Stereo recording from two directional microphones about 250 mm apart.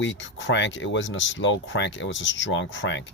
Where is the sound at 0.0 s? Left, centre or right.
Left.